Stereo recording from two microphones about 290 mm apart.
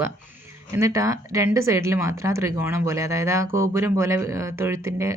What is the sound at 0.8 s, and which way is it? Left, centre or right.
Speech, centre.